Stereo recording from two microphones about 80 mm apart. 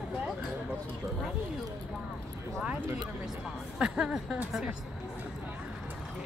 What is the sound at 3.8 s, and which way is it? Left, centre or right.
Speech, centre.